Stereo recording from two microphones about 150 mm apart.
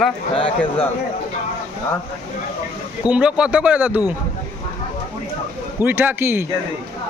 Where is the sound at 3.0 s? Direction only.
5° right (ahead or behind).